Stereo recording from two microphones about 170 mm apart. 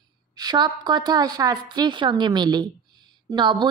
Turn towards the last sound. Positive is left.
turn(degrees=-25)  # may be behind; listen again after turning